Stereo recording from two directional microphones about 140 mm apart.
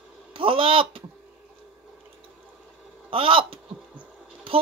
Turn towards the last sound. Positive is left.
turn(degrees=-10)  # may be behind; listen again after turning